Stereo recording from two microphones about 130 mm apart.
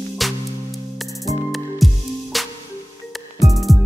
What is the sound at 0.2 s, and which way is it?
Music, centre (ahead or behind).